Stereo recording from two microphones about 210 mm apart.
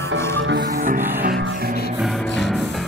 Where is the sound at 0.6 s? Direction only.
40° right (ahead or behind).